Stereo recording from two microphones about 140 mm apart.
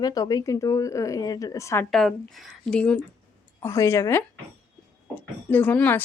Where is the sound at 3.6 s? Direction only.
20° left (ahead or behind).